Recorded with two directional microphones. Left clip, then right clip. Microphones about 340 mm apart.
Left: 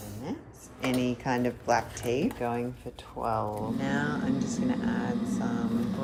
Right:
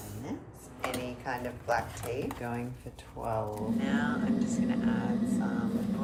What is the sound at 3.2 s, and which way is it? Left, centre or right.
Speech, left.